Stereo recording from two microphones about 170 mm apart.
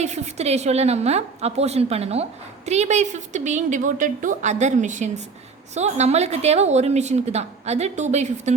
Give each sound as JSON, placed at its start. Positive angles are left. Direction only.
{"t": 0.0, "sound": "a woman's voice", "side_deg": -40}